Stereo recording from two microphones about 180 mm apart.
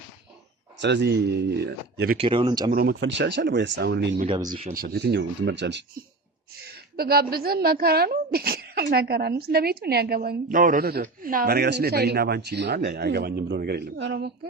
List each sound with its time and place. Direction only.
0.8 s speech: 75° right (ahead or behind)
2.1 s speech: 30° right (ahead or behind)
2.7 s speech: 75° right (ahead or behind)
4.3 s speech: 25° right (ahead or behind)
4.7 s speech: 55° right (ahead or behind); by 5.8 s 80° right
6.7 s a woman's voice: 60° right (ahead or behind)